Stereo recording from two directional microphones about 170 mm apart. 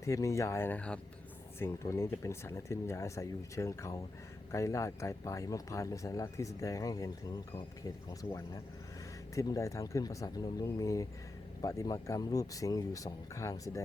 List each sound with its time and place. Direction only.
0.0 s speech: 15° left (ahead or behind)